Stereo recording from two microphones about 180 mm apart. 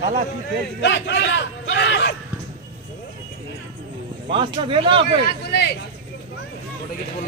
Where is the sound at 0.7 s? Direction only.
80° left.